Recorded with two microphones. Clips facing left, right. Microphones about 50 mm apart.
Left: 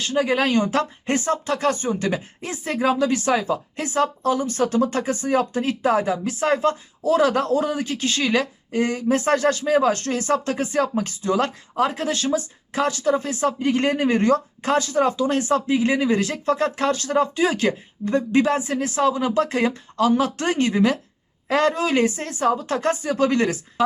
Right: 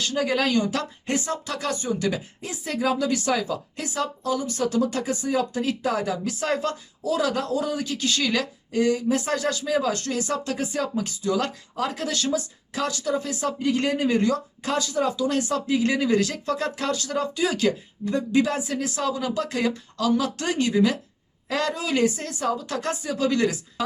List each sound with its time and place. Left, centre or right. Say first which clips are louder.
0.0 s speech: left 3 dB; left